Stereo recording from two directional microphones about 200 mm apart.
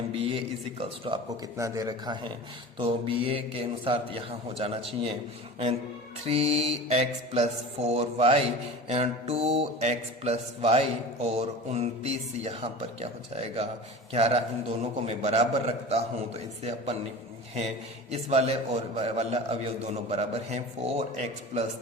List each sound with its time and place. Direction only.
0.1 s a man's voice: 30° right (ahead or behind)
6.2 s mantra: 30° right (ahead or behind)
18.1 s mantra: 30° right (ahead or behind)